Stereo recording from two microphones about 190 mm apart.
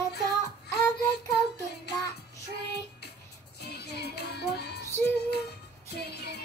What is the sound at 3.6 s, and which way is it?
Music, 60° left (ahead or behind).